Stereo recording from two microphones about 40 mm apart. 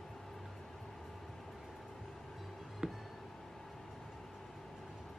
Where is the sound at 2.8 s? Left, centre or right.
Centre.